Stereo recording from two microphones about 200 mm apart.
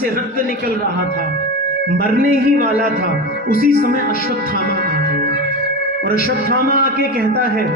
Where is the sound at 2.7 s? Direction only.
45° left (ahead or behind).